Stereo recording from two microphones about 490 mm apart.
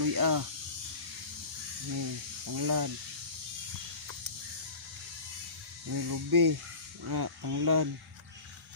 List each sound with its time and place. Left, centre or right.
0.0 s speech: right
2.0 s speech: right
5.9 s speech: right